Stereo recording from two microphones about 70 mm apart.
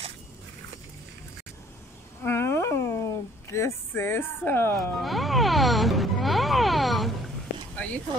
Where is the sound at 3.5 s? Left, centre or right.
Left.